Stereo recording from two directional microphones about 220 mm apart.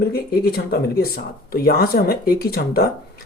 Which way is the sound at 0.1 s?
45° left (ahead or behind).